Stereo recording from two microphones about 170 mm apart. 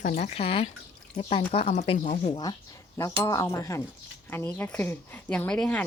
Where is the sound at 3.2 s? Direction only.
15° left (ahead or behind).